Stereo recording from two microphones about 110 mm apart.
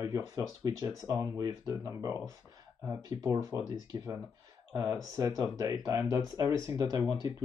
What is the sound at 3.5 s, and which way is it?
Speech, 35° right (ahead or behind).